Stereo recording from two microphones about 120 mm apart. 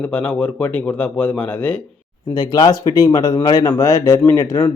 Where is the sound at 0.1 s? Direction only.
10° left (ahead or behind).